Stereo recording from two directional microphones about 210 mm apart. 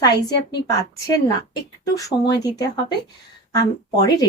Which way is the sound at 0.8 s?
15° left (ahead or behind).